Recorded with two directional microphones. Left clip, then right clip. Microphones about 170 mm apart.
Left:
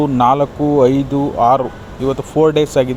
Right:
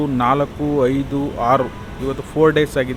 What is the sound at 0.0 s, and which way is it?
Speech, 25° left (ahead or behind).